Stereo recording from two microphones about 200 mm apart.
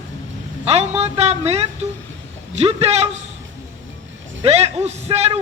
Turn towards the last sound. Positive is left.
turn(degrees=-30)  # may be behind; listen again after turning